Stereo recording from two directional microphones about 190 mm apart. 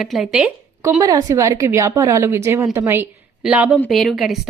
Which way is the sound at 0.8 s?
15° right (ahead or behind).